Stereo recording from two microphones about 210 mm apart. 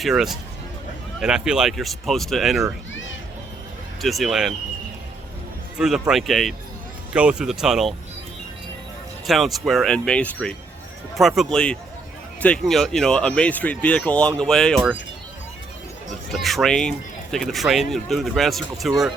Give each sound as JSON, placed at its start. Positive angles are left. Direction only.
{"t": 0.0, "sound": "speech", "side_deg": 0}
{"t": 2.9, "sound": "children playing", "side_deg": 65}
{"t": 4.0, "sound": "speech", "side_deg": 0}
{"t": 5.7, "sound": "speech", "side_deg": 0}
{"t": 9.2, "sound": "speech", "side_deg": 0}
{"t": 16.3, "sound": "speech", "side_deg": 0}